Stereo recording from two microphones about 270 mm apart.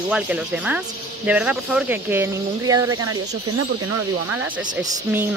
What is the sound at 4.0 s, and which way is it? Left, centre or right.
Speech, right.